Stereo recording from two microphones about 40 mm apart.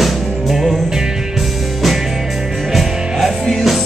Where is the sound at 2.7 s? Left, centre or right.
Centre.